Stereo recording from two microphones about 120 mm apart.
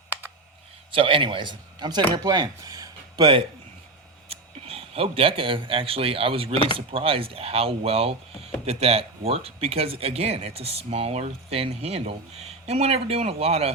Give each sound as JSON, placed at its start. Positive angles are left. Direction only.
{"t": 0.9, "sound": "a man's voice", "side_deg": -50}
{"t": 4.3, "sound": "a man's voice", "side_deg": -55}